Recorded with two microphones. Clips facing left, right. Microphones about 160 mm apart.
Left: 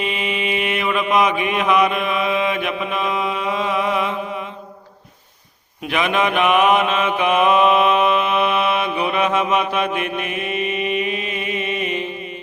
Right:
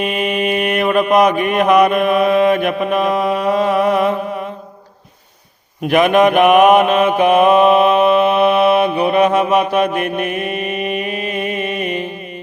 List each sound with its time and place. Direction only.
0.0 s mantra: 50° right (ahead or behind)
5.9 s mantra: 50° right (ahead or behind)